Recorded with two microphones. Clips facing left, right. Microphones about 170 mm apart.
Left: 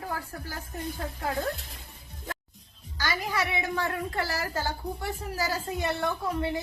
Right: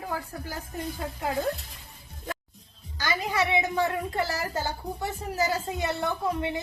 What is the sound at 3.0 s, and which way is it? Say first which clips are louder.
A woman's voice: right 2 dB; 20° right (ahead or behind).